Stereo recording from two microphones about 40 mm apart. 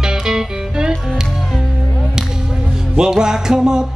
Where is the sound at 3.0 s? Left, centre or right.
Centre.